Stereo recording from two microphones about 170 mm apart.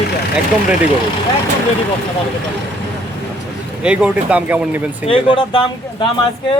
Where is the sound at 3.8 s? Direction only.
5° right (ahead or behind).